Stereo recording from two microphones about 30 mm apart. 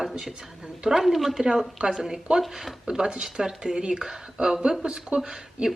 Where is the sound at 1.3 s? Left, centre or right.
Centre.